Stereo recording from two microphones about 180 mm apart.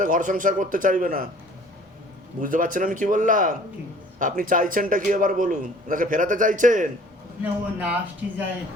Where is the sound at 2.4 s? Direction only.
50° right (ahead or behind).